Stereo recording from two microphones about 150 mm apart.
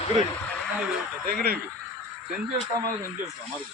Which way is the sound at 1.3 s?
80° right.